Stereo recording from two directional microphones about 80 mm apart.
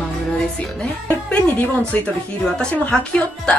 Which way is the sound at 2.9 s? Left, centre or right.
Centre.